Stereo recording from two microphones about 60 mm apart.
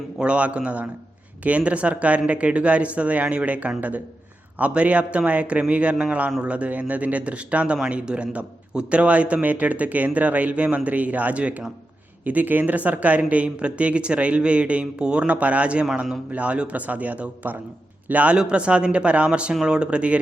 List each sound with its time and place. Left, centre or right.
0.2 s a man's voice: centre